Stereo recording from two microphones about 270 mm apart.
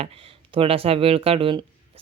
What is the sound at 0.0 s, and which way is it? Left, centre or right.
Speech, right.